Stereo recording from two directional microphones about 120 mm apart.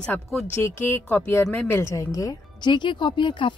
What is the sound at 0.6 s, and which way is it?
A woman's voice, 20° left (ahead or behind).